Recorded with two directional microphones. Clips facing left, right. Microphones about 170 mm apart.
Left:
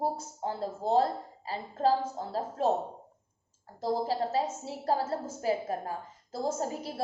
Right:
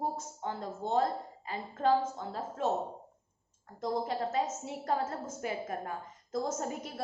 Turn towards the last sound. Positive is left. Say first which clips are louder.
# left 3 dB
turn(degrees=30)  # may be behind; listen again after turning